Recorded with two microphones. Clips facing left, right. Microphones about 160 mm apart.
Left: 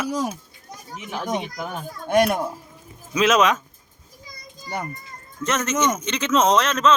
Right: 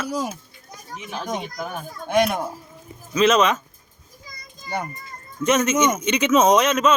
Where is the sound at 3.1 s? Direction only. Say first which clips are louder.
Right 1 dB; centre (ahead or behind).